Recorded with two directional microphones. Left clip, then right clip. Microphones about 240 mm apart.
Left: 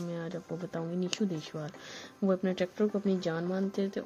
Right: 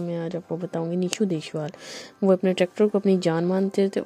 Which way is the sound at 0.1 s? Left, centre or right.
Right.